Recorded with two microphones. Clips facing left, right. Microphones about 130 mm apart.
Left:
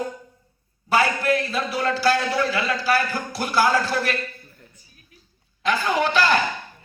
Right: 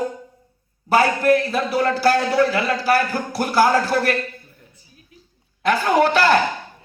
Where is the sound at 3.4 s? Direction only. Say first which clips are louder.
Right 4 dB; 50° right (ahead or behind).